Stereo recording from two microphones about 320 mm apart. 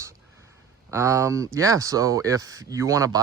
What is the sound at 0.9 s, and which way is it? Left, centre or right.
Speech, centre.